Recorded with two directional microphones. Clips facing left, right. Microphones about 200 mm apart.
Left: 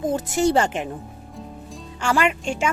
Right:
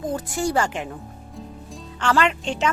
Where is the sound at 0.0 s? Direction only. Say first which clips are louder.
Left 4 dB; 20° left (ahead or behind).